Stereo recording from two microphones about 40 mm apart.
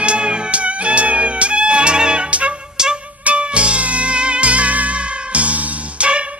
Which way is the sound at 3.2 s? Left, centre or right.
Right.